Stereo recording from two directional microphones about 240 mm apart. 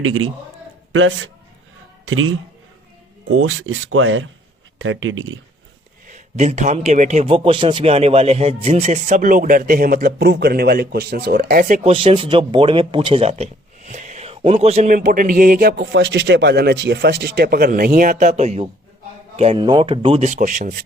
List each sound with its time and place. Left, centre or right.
0.0 s speech: right
6.1 s a man's voice: right
11.8 s a man's voice: right